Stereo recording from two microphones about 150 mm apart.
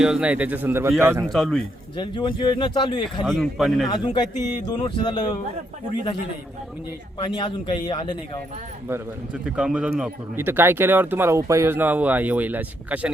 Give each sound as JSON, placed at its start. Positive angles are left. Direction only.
{"t": 0.0, "sound": "speech", "side_deg": -5}
{"t": 1.3, "sound": "speech", "side_deg": 0}
{"t": 2.0, "sound": "speech", "side_deg": 35}
{"t": 3.2, "sound": "speech", "side_deg": 0}
{"t": 3.8, "sound": "a man's voice", "side_deg": 30}
{"t": 7.2, "sound": "speech", "side_deg": 30}
{"t": 8.9, "sound": "speech", "side_deg": -5}